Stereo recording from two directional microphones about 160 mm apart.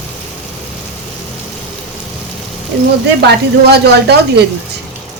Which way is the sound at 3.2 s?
90° right.